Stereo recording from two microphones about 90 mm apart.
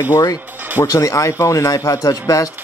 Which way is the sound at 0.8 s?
35° left (ahead or behind).